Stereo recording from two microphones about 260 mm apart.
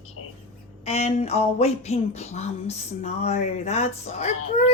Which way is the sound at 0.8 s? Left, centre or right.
Left.